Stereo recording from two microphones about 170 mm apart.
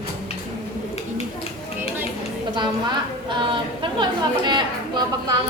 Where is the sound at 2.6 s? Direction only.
25° right (ahead or behind).